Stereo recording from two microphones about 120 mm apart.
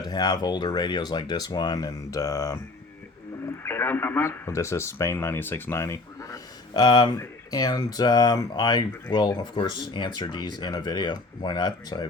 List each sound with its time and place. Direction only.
0.0 s speech: 35° left (ahead or behind)
3.6 s speech: 20° left (ahead or behind); by 12.0 s 40° left (ahead or behind)